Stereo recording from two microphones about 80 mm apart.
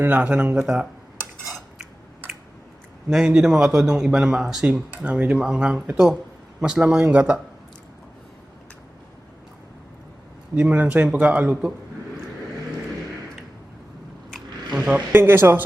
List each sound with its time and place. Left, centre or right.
0.0 s speech: centre
1.5 s cutlery: centre
3.1 s speech: centre
10.5 s speech: centre
14.8 s vehicle: centre
15.1 s speech: right